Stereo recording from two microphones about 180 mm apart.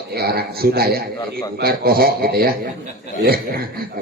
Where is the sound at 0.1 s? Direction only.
60° right (ahead or behind).